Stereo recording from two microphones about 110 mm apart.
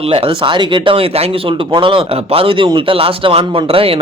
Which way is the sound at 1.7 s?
50° right (ahead or behind).